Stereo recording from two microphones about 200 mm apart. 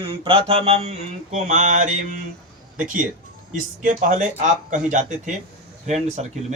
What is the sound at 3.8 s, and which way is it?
Speech, 40° right (ahead or behind).